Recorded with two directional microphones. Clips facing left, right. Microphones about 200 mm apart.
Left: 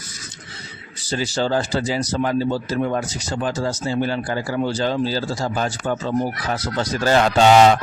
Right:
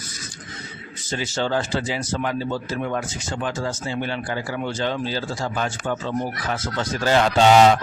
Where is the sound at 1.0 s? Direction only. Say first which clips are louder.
Left 3 dB; 35° left (ahead or behind).